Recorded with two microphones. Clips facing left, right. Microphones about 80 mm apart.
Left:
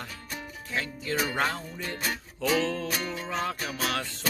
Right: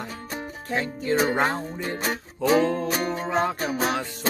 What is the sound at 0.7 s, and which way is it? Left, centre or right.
Music, right.